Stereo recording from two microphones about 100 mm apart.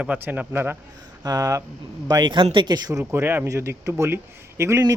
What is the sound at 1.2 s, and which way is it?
Speech, 35° right (ahead or behind).